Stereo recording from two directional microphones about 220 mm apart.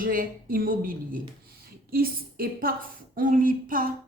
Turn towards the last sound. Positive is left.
turn(degrees=-40)  # may be behind; listen again after turning